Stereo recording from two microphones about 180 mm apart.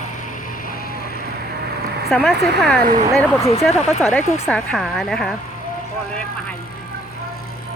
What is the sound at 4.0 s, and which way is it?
Speech, 5° left (ahead or behind).